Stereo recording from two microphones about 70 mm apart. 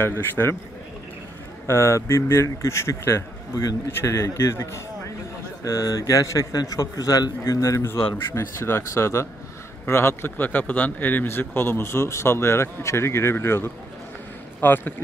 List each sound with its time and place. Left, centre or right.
0.0 s a man's voice: left
1.7 s a man's voice: left
5.6 s a man's voice: left
7.8 s a man's voice: left
10.3 s a man's voice: left